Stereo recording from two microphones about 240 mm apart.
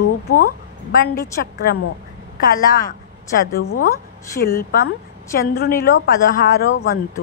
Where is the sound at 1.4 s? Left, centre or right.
Left.